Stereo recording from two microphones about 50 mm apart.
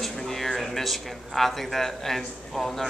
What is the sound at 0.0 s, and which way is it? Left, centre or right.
Speech, centre.